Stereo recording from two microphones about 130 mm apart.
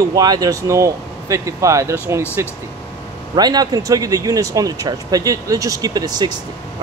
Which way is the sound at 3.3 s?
30° right (ahead or behind).